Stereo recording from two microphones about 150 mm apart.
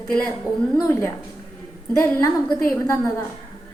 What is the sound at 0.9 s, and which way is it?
A woman's voice, 15° left (ahead or behind).